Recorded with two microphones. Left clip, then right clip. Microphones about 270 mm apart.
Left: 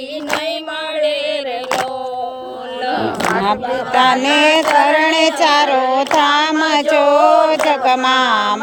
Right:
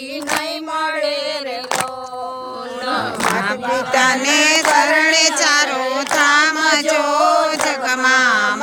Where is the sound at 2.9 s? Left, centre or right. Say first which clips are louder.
Left 1 dB; right.